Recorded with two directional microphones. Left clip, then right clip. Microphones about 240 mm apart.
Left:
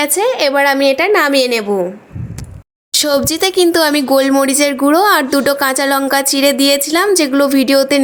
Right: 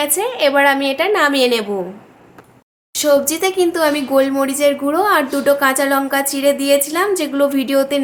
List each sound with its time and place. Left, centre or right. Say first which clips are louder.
0.0 s a woman's voice: left 3 dB; left
2.9 s a woman's voice: left 1 dB; left